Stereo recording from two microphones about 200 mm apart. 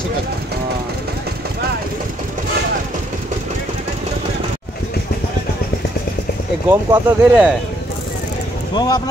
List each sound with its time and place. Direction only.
6.7 s speech: 10° right (ahead or behind)
8.7 s speech: 20° left (ahead or behind)